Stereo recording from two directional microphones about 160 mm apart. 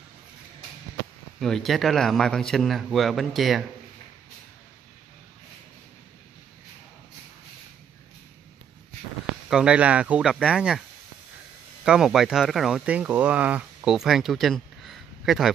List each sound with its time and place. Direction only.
1.4 s speech: centre (ahead or behind)
9.5 s speech: 5° right (ahead or behind)
11.8 s speech: 5° right (ahead or behind)